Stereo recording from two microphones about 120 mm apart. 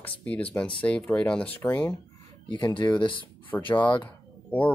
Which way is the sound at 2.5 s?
40° left (ahead or behind).